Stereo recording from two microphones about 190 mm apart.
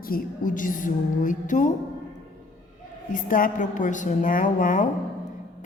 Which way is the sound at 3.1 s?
45° left (ahead or behind).